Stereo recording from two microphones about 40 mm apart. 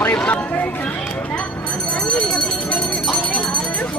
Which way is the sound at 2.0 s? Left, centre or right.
Left.